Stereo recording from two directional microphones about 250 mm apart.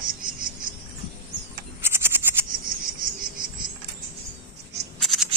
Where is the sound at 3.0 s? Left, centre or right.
Right.